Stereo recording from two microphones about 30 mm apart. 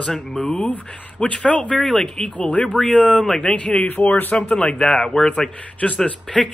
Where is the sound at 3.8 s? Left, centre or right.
Left.